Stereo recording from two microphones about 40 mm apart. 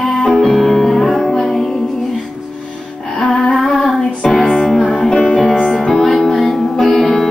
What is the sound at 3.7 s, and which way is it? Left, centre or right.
Music, centre.